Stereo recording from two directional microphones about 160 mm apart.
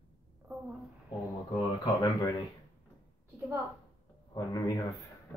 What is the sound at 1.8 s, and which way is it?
Speech, 25° left (ahead or behind).